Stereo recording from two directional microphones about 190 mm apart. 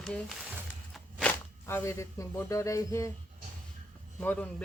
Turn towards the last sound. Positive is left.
turn(degrees=10)  # may be behind; listen again after turning